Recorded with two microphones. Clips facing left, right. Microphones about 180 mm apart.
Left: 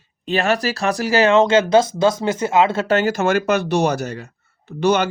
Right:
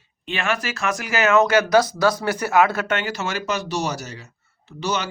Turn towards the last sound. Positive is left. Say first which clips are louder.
# left 9 dB
turn(degrees=55)  # may be behind; listen again after turning